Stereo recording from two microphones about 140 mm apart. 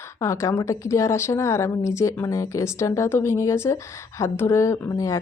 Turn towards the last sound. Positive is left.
turn(degrees=25)  # may be behind; listen again after turning